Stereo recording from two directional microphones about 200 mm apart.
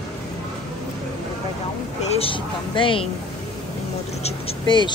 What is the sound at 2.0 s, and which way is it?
A woman's voice, 30° left (ahead or behind).